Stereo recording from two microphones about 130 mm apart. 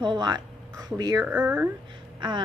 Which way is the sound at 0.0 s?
35° right (ahead or behind).